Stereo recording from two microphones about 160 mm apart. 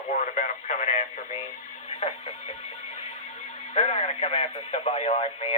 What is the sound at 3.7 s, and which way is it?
Speech, 45° left (ahead or behind).